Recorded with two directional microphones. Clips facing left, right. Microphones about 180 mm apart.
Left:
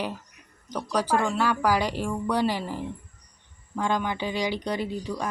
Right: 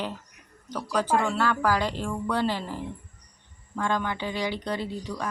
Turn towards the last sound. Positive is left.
turn(degrees=15)  # may be behind; listen again after turning